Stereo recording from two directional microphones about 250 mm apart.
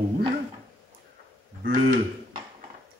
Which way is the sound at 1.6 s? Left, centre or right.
Right.